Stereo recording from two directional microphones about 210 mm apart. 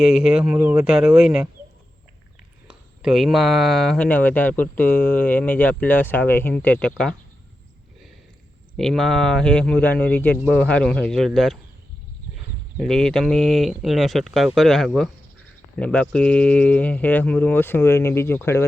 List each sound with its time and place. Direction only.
0.0 s speech: 5° right (ahead or behind)
2.6 s speech: centre (ahead or behind)
8.8 s speech: centre (ahead or behind)
12.7 s speech: centre (ahead or behind)